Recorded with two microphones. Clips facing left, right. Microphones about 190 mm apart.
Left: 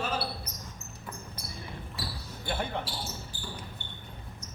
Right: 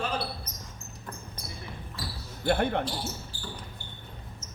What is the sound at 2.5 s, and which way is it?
Speech, 60° right (ahead or behind).